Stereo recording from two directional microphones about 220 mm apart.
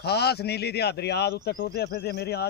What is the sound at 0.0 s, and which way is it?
A man's voice, 45° left (ahead or behind).